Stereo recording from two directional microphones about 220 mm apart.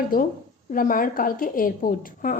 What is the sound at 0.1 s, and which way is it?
A woman's voice, 40° left (ahead or behind).